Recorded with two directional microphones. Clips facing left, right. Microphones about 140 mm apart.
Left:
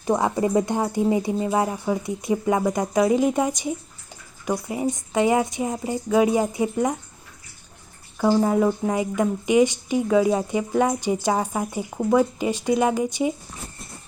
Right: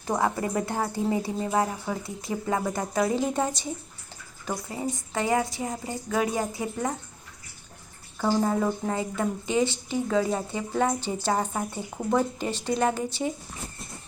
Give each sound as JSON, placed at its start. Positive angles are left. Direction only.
{"t": 0.0, "sound": "speech", "side_deg": 15}
{"t": 8.2, "sound": "speech", "side_deg": 10}